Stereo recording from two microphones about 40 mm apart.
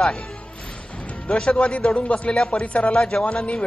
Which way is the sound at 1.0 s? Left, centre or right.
Left.